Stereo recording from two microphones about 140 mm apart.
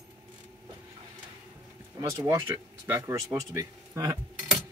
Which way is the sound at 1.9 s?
25° right (ahead or behind).